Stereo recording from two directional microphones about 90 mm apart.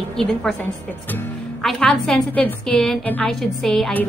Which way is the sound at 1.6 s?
5° left (ahead or behind).